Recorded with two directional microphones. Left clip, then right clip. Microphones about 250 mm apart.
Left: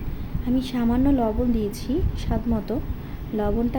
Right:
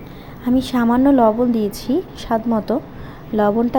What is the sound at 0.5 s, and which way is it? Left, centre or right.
A woman's voice, centre.